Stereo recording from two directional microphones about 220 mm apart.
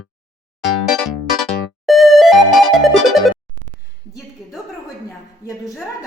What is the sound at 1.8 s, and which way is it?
Music, centre (ahead or behind).